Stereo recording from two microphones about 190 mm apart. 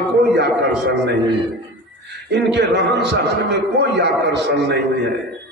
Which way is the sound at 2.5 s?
65° right (ahead or behind).